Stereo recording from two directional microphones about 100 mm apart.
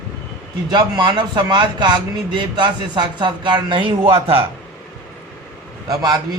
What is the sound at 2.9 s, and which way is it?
Speech, 50° right (ahead or behind).